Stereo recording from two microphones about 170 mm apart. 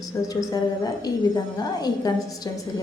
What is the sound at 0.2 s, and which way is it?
A woman's voice, 20° left (ahead or behind).